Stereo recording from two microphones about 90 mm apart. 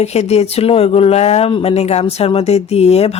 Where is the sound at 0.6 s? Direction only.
90° left.